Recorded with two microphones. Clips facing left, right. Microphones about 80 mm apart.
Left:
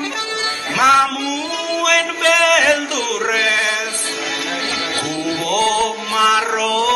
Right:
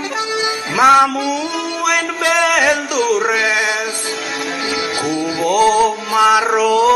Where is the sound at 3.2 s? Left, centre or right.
Centre.